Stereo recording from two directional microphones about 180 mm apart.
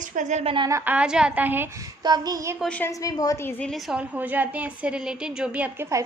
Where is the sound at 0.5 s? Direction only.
20° right (ahead or behind).